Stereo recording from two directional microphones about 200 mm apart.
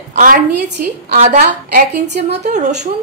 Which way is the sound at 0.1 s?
40° right (ahead or behind).